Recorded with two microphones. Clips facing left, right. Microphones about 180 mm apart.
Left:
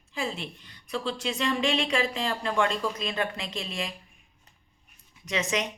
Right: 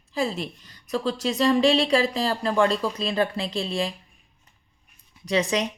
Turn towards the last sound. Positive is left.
turn(degrees=-35)  # may be behind; listen again after turning